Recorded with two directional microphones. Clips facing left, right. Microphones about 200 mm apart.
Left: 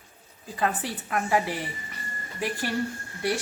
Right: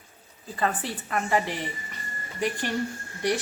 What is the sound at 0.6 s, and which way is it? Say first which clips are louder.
A woman's voice: even; 5° left (ahead or behind).